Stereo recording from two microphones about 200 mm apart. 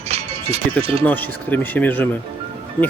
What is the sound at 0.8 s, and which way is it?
Speech, 30° right (ahead or behind).